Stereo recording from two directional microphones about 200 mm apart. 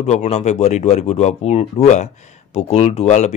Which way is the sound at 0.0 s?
35° left (ahead or behind).